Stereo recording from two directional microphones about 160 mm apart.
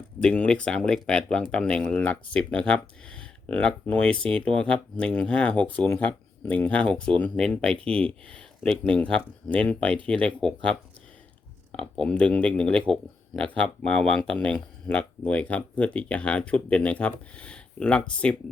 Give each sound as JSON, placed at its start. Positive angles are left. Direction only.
{"t": 0.2, "sound": "speech", "side_deg": 5}
{"t": 11.8, "sound": "speech", "side_deg": 5}